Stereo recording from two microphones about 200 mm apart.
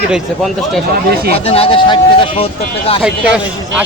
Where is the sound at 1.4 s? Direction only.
30° left (ahead or behind).